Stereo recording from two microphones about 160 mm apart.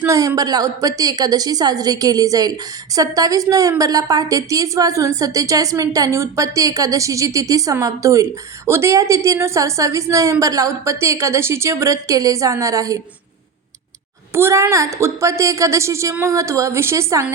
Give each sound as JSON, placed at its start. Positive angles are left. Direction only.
{"t": 0.0, "sound": "a woman's voice", "side_deg": -20}
{"t": 14.3, "sound": "a woman's voice", "side_deg": -15}